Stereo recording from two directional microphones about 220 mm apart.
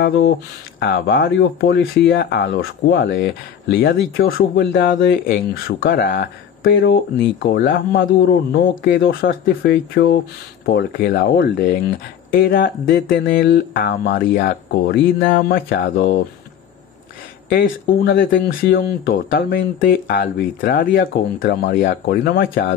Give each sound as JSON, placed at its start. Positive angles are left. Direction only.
{"t": 0.7, "sound": "speech", "side_deg": 45}
{"t": 6.7, "sound": "speech", "side_deg": 55}
{"t": 17.5, "sound": "speech", "side_deg": 50}